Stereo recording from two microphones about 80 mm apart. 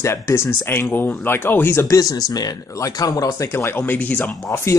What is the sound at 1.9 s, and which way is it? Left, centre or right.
Speech, left.